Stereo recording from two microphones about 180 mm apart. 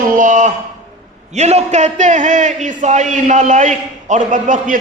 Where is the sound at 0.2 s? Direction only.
45° right (ahead or behind).